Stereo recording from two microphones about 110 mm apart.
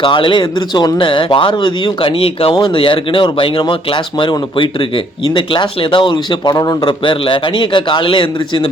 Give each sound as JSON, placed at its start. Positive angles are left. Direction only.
{"t": 0.0, "sound": "speech", "side_deg": 50}